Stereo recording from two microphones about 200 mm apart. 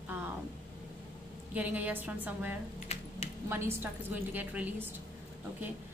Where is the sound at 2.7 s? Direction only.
30° left (ahead or behind).